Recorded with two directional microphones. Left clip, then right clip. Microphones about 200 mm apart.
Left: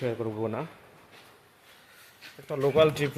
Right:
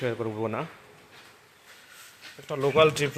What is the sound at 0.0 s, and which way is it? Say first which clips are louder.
Speech: right 1 dB; 10° right (ahead or behind).